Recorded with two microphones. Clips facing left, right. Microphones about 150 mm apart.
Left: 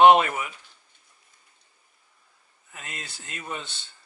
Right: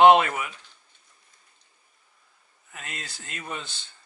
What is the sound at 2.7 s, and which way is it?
Speech, 20° left (ahead or behind).